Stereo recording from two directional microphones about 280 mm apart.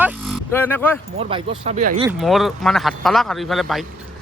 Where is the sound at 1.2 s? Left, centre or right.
Centre.